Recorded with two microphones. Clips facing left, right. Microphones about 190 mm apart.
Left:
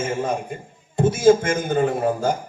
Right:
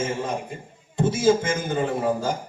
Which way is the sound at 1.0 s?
55° left (ahead or behind).